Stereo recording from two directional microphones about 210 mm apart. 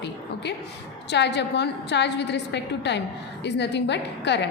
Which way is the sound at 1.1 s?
55° left (ahead or behind).